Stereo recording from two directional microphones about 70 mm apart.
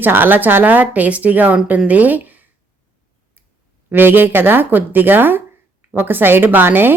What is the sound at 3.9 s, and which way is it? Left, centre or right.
A woman's voice, right.